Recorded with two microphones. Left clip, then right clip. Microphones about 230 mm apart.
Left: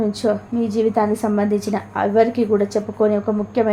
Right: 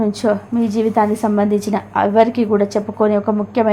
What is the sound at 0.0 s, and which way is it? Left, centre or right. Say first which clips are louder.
A woman's voice: right 2 dB; centre.